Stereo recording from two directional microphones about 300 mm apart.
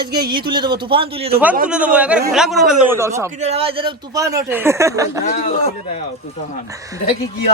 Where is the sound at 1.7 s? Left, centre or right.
Centre.